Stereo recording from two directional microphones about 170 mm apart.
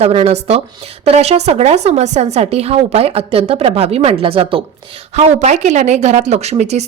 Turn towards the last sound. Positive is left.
turn(degrees=-40)  # may be behind; listen again after turning